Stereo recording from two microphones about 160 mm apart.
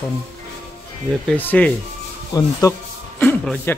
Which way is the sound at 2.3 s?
20° left (ahead or behind).